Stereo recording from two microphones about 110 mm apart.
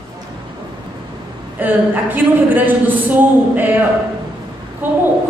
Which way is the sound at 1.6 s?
15° right (ahead or behind).